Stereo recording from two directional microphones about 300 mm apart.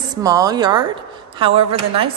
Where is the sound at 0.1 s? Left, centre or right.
Centre.